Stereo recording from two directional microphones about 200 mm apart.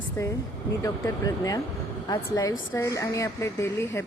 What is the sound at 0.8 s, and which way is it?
Speech, 15° left (ahead or behind).